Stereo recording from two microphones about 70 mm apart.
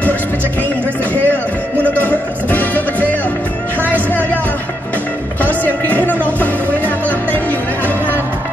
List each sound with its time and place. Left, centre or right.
0.0 s music: left
5.4 s music: left